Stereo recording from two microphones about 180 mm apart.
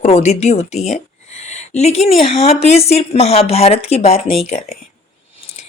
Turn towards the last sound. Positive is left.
turn(degrees=35)  # may be behind; listen again after turning